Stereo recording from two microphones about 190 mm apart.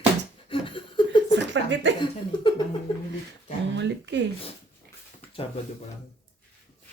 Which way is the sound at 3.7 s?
70° right (ahead or behind).